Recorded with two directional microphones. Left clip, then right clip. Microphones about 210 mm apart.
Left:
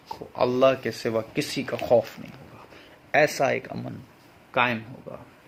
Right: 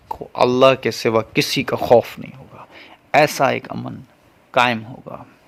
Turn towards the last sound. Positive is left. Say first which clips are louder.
# right 7 dB
turn(degrees=-45)  # may be behind; listen again after turning